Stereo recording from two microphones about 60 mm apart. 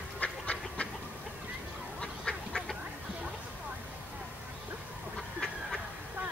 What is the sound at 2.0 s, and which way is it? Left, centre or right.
Duck, centre.